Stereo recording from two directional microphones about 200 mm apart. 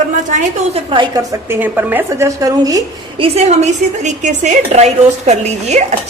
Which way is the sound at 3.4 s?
35° right (ahead or behind).